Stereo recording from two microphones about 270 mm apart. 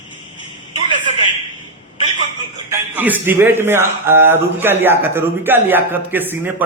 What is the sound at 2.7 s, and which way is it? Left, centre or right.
A man's voice, centre.